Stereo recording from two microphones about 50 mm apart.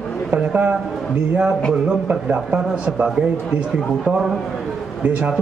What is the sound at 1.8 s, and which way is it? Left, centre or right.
A man's voice, right.